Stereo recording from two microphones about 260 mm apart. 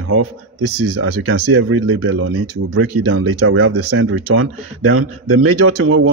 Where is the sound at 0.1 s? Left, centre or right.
Right.